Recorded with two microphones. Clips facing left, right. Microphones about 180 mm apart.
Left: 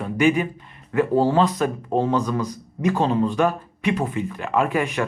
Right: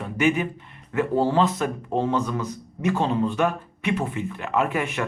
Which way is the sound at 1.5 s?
35° left (ahead or behind).